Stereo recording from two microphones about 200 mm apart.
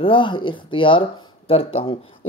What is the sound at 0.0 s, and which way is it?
Speech, 25° left (ahead or behind).